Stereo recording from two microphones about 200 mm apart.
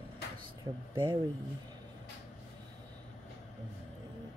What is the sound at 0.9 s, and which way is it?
Speech, 25° right (ahead or behind).